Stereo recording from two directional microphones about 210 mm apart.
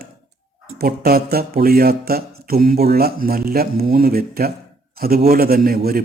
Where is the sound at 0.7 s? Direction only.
45° right (ahead or behind).